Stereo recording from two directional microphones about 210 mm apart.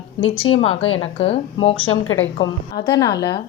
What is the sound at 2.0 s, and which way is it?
Speech, 70° left (ahead or behind).